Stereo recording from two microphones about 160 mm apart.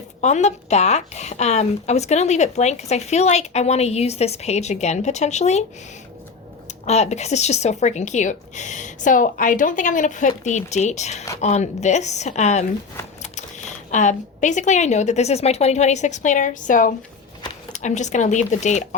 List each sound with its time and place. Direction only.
0.2 s speech: 45° left (ahead or behind)
6.8 s speech: 45° left (ahead or behind)
13.9 s speech: 50° left (ahead or behind)